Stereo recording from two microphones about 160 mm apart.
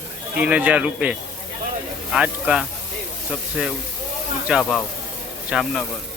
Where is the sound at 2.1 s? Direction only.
5° right (ahead or behind).